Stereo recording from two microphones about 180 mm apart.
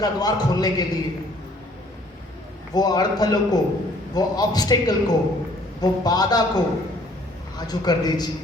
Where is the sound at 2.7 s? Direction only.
20° left (ahead or behind).